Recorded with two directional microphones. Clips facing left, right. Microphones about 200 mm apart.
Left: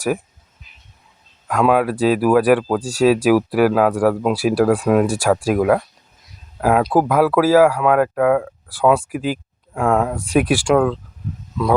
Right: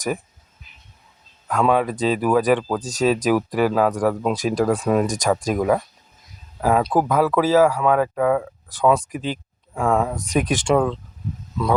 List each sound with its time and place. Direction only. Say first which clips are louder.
1.5 s speech: left 3 dB; 10° left (ahead or behind)
10.7 s speech: even; centre (ahead or behind)